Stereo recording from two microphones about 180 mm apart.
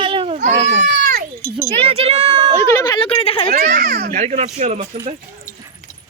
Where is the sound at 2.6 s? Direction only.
20° left (ahead or behind).